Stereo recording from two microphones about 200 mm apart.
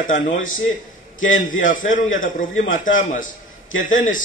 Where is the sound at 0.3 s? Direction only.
80° left.